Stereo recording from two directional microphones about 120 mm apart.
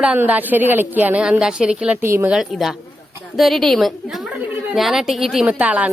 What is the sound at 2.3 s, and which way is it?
A woman's voice, 5° right (ahead or behind).